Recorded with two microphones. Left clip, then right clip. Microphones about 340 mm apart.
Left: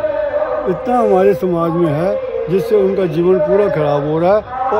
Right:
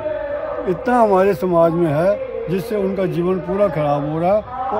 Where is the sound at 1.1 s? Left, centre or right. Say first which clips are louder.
Left 3 dB; centre.